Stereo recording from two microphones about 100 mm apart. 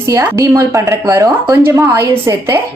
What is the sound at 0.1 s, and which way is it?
A woman's voice, 30° right (ahead or behind).